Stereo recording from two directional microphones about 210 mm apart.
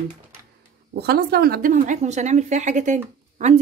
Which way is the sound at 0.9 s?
50° right (ahead or behind).